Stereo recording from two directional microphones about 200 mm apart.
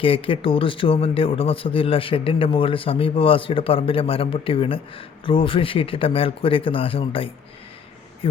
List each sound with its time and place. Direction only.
0.0 s a man's voice: 25° left (ahead or behind)